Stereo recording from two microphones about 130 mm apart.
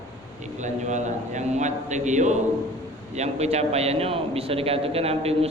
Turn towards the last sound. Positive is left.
turn(degrees=-50)  # may be behind; listen again after turning